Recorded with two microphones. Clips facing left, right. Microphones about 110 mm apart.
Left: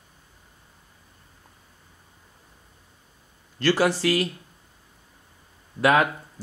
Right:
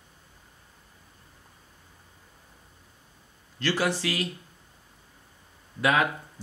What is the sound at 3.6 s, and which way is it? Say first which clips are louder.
Speech: left 6 dB; 45° left (ahead or behind).